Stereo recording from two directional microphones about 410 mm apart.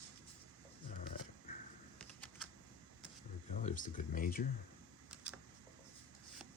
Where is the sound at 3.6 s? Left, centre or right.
Centre.